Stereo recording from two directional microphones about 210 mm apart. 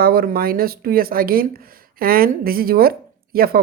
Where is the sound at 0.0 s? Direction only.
45° right (ahead or behind).